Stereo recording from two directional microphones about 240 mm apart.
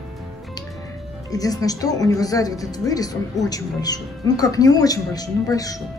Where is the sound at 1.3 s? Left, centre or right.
Centre.